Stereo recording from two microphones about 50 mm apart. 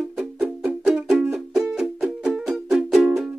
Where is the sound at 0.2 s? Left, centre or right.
Centre.